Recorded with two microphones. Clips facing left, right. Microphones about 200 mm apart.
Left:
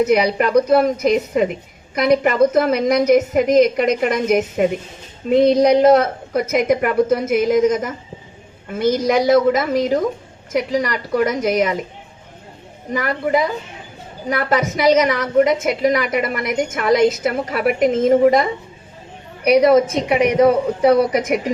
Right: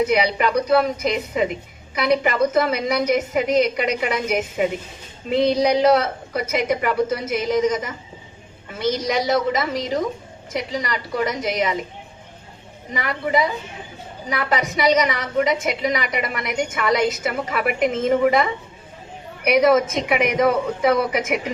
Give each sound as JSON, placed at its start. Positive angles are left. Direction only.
{"t": 0.0, "sound": "a woman's voice", "side_deg": 40}
{"t": 9.0, "sound": "speech", "side_deg": 50}
{"t": 12.9, "sound": "a woman's voice", "side_deg": 45}
{"t": 19.5, "sound": "a woman's voice", "side_deg": 35}